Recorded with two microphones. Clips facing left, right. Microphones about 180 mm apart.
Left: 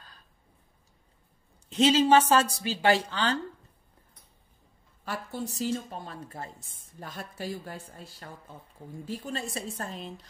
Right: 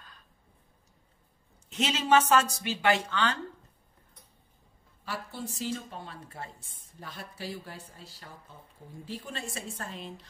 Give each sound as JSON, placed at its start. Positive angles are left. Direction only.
{"t": 1.7, "sound": "speech", "side_deg": 30}
{"t": 5.0, "sound": "speech", "side_deg": 45}